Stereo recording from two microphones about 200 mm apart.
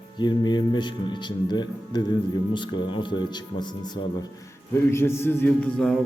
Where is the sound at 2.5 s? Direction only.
25° left (ahead or behind).